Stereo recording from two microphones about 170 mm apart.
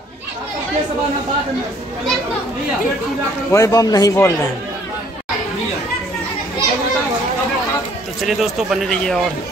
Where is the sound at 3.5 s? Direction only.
20° left (ahead or behind).